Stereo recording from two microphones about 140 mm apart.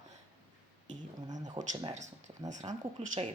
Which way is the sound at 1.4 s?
35° right (ahead or behind).